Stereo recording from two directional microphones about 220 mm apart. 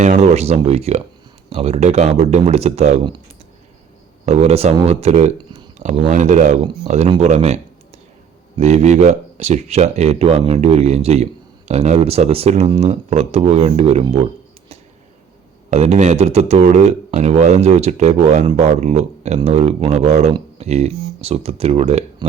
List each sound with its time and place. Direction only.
0.0 s speech: 30° right (ahead or behind)
4.3 s speech: 30° right (ahead or behind)
15.7 s speech: 30° right (ahead or behind)